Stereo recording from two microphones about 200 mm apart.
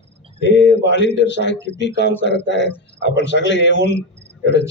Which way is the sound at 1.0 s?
60° left (ahead or behind).